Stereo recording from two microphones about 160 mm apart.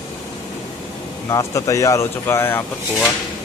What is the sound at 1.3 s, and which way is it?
Speech, 20° left (ahead or behind).